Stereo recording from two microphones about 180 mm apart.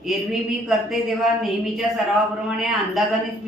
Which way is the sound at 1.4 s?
Centre (ahead or behind).